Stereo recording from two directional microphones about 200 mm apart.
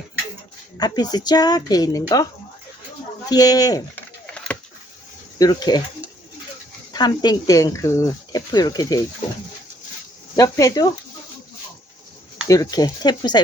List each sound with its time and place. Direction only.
0.8 s speech: 20° left (ahead or behind)
3.2 s speech: 20° left (ahead or behind)
5.4 s speech: 20° left (ahead or behind)
6.9 s speech: 20° left (ahead or behind)
10.3 s speech: 15° left (ahead or behind)
12.5 s speech: 20° left (ahead or behind)